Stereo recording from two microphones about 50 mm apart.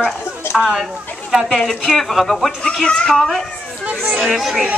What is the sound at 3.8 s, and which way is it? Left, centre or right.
Children playing, right.